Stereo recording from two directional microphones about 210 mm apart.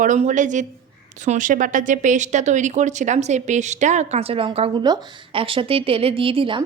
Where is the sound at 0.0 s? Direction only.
35° right (ahead or behind).